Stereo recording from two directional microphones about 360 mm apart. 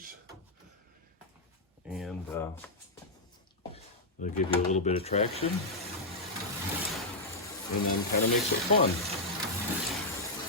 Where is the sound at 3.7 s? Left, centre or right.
Centre.